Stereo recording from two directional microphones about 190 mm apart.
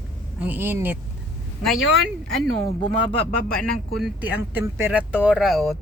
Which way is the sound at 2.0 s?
Centre (ahead or behind).